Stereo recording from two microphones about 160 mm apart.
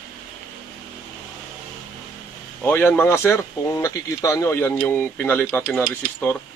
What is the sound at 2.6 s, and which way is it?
Speech, 10° left (ahead or behind).